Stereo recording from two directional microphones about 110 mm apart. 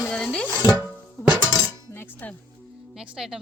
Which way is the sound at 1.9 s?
20° left (ahead or behind).